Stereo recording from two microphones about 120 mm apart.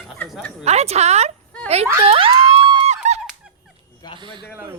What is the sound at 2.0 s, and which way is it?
Speech, 50° right (ahead or behind).